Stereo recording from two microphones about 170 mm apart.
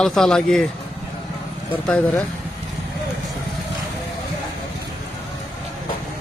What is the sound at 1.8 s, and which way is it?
Speech, 10° left (ahead or behind).